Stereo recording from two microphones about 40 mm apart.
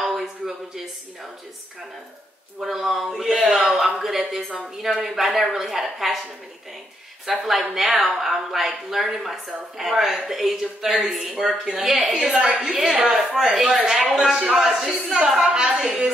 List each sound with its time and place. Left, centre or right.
0.0 s a sound: centre
2.6 s speech: centre
7.2 s speech: centre